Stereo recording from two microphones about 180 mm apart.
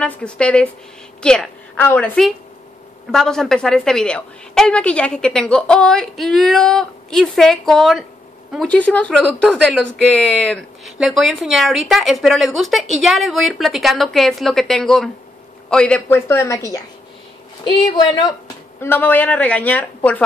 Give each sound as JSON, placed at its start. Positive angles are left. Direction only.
{"t": 0.0, "sound": "a woman's voice", "side_deg": 5}
{"t": 18.8, "sound": "speech", "side_deg": 10}